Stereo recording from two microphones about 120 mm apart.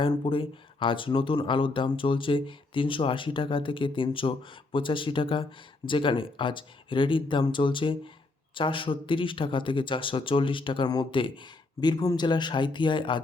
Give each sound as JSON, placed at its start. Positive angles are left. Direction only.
{"t": 0.0, "sound": "speech", "side_deg": 45}